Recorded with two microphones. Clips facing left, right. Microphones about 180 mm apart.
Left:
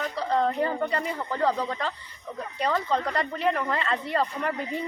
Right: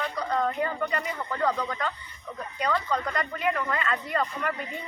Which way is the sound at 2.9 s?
30° left (ahead or behind).